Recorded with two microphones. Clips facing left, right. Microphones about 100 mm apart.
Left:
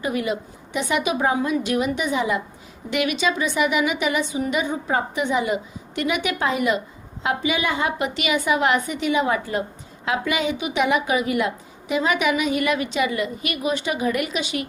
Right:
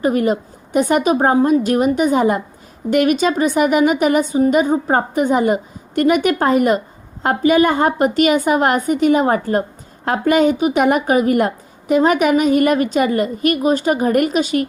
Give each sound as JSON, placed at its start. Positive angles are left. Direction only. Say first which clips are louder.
{"t": 0.0, "sound": "a woman's voice", "louder": "right 8 dB", "side_deg": -45}